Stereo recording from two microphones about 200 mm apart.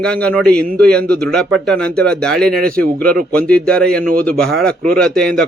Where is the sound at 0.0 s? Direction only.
5° left (ahead or behind).